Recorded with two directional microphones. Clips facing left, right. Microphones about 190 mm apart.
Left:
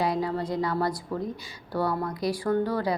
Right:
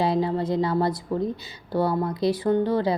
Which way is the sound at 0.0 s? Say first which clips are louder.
Right 4 dB; 25° right (ahead or behind).